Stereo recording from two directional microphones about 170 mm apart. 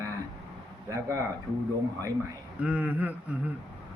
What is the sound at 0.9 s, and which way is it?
Speech, 15° right (ahead or behind).